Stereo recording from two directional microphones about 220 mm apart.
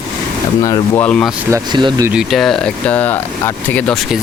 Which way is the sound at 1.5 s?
20° right (ahead or behind).